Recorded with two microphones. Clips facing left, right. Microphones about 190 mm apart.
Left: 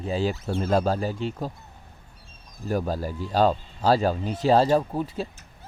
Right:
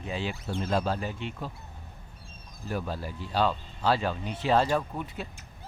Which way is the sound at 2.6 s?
40° left (ahead or behind).